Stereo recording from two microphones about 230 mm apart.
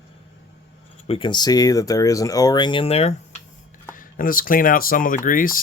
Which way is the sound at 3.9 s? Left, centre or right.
Left.